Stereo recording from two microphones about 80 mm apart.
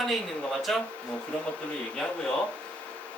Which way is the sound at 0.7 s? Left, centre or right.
Centre.